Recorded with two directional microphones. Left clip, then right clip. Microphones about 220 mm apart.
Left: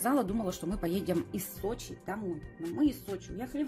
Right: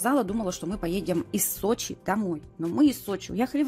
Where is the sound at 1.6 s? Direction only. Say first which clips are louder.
Right 10 dB; 45° right (ahead or behind).